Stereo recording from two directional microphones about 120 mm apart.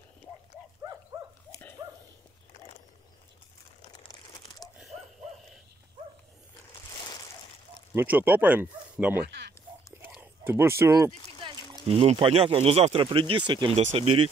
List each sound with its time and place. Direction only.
0.2 s livestock: 15° left (ahead or behind)
1.1 s dog: 30° right (ahead or behind)
3.9 s crumpling: 30° left (ahead or behind)
7.9 s speech: 15° right (ahead or behind)
10.4 s speech: 20° right (ahead or behind)
11.9 s speech: 55° right (ahead or behind)
13.7 s speech: 55° right (ahead or behind)